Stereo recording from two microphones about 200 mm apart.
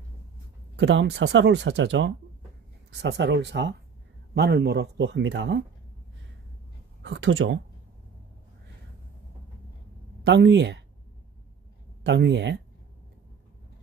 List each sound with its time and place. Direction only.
0.7 s speech: 60° right (ahead or behind)
7.0 s speech: 65° right (ahead or behind)
10.2 s speech: 60° right (ahead or behind)
12.0 s speech: 60° right (ahead or behind)